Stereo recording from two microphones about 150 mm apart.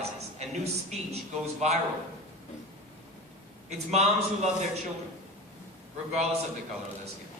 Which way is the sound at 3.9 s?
50° right (ahead or behind).